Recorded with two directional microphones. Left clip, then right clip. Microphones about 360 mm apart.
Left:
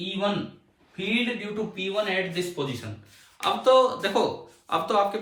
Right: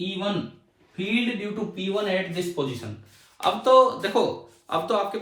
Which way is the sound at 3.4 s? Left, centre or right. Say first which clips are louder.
Right 2 dB; centre.